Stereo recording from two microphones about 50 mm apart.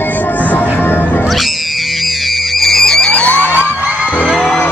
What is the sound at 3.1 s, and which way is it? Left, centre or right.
Music, left.